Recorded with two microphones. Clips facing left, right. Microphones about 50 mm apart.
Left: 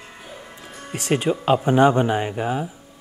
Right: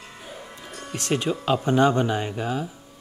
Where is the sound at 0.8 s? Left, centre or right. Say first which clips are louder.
Left 3 dB; centre.